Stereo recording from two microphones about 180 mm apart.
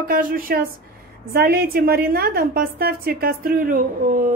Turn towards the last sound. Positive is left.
turn(degrees=-55)  # may be behind; listen again after turning